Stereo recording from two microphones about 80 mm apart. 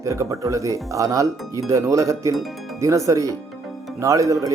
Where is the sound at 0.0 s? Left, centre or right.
Right.